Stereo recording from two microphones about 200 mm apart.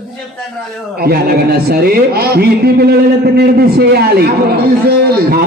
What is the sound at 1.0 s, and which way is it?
A man's voice, 50° right (ahead or behind).